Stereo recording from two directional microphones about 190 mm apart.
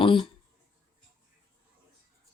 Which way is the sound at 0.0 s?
25° left (ahead or behind).